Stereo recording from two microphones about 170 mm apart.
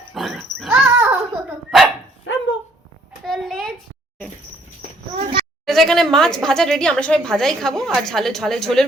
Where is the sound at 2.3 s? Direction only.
90° left.